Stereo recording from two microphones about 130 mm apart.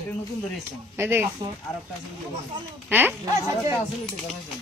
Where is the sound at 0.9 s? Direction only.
15° right (ahead or behind).